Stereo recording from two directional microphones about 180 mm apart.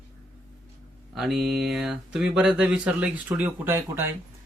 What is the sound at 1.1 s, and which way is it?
Speech, centre (ahead or behind).